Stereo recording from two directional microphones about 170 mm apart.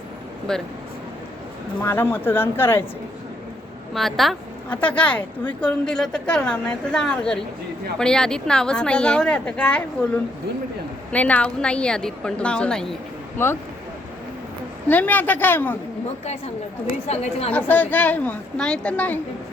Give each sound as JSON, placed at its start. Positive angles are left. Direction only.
{"t": 0.5, "sound": "a woman's voice", "side_deg": 5}
{"t": 1.8, "sound": "a woman's voice", "side_deg": 15}
{"t": 3.9, "sound": "a woman's voice", "side_deg": 0}
{"t": 11.1, "sound": "a woman's voice", "side_deg": 10}
{"t": 14.8, "sound": "a woman's voice", "side_deg": 10}
{"t": 17.1, "sound": "a woman's voice", "side_deg": 40}
{"t": 17.5, "sound": "a woman's voice", "side_deg": 10}